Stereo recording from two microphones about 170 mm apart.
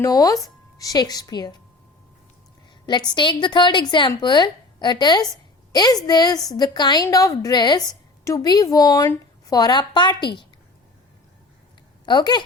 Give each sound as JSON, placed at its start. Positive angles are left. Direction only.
{"t": 0.0, "sound": "a woman's voice", "side_deg": 20}
{"t": 3.1, "sound": "a woman's voice", "side_deg": 25}
{"t": 12.0, "sound": "a woman's voice", "side_deg": 25}